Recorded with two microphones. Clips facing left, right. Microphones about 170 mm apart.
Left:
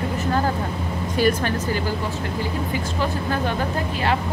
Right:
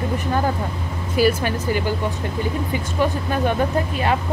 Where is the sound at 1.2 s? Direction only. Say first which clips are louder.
Right 2 dB; 10° right (ahead or behind).